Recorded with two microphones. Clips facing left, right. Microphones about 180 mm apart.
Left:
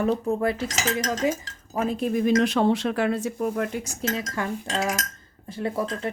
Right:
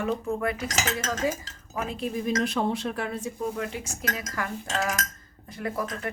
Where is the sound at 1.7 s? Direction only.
45° left (ahead or behind).